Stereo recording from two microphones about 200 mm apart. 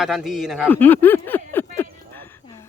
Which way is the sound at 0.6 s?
10° left (ahead or behind).